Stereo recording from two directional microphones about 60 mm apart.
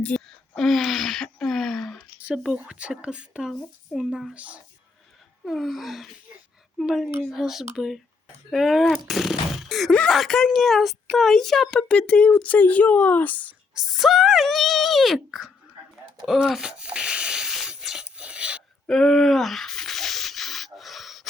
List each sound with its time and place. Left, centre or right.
0.3 s a sound: centre
2.5 s speech: centre
3.9 s a woman's voice: centre
4.4 s speech: right
5.5 s a woman's voice: centre
9.0 s a sound: centre
10.1 s a woman's voice: centre
11.8 s speech: centre
13.7 s a woman's voice: centre
16.6 s a sound: centre
18.2 s filing: centre
18.9 s sanding: centre